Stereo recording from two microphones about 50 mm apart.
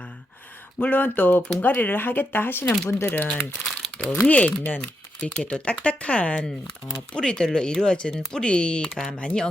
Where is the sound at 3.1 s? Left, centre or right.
Left.